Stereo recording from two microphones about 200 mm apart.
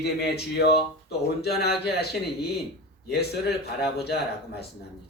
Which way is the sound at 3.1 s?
55° left (ahead or behind).